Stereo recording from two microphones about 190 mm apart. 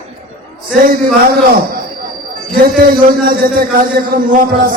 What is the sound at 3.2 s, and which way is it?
A man's voice, 55° right (ahead or behind).